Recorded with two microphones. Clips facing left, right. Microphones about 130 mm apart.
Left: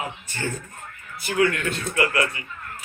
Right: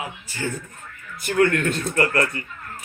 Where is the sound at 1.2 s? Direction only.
50° right (ahead or behind).